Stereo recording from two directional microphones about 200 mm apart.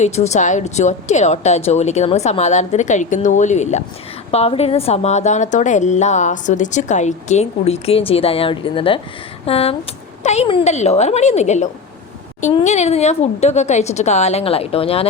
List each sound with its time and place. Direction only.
0.0 s a woman's voice: 35° left (ahead or behind)